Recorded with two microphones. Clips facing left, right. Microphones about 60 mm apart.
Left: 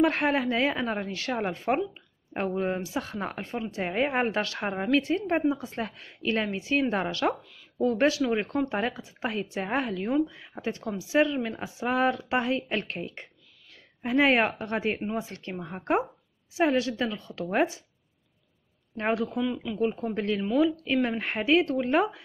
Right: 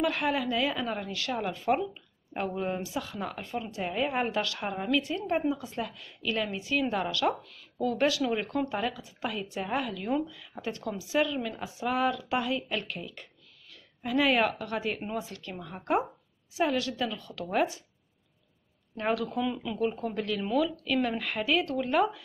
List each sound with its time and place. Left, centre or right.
0.0 s speech: left
18.9 s speech: left
19.4 s speech: centre
20.2 s speech: left